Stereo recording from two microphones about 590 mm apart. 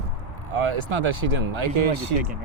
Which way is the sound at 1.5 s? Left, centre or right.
Right.